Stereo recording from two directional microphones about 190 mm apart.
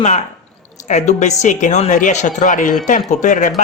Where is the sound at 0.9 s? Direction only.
40° left (ahead or behind).